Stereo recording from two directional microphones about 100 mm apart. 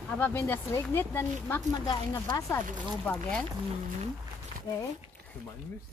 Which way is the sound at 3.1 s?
10° left (ahead or behind).